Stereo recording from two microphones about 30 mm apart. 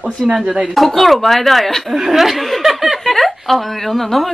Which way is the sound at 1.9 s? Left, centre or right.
Centre.